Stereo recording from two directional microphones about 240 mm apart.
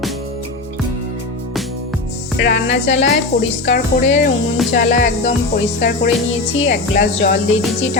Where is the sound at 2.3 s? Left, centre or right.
Left.